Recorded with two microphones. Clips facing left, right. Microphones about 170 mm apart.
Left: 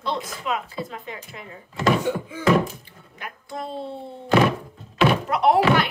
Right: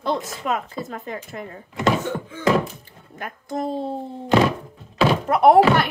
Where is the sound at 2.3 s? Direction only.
10° left (ahead or behind).